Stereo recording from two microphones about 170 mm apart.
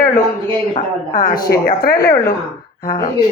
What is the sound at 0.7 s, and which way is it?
Speech, 50° left (ahead or behind).